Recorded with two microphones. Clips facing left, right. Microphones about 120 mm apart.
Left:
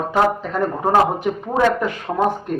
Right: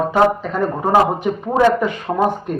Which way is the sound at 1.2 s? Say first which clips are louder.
Right 3 dB; 10° right (ahead or behind).